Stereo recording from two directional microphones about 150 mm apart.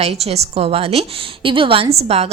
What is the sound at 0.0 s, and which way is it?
Speech, 45° right (ahead or behind).